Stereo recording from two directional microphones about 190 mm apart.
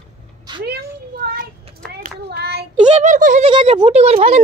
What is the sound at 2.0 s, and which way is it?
Child singing, 60° right (ahead or behind).